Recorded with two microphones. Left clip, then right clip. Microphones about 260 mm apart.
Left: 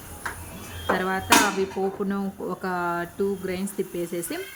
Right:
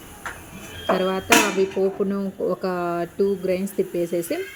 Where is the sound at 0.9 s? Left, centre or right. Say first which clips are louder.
Right 3 dB; centre.